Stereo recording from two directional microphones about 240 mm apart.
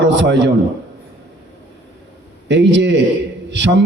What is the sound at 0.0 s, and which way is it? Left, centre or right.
Speech, right.